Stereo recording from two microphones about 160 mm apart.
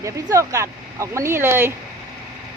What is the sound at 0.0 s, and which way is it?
Speech, 20° right (ahead or behind).